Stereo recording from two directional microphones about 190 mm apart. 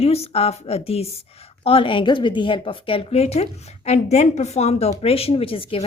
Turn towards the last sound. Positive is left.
turn(degrees=30)  # may be behind; listen again after turning